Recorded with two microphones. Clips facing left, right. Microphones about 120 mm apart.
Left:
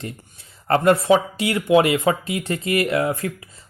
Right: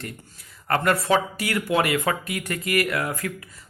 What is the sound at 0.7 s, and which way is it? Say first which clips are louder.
Speech: left 6 dB; 25° left (ahead or behind).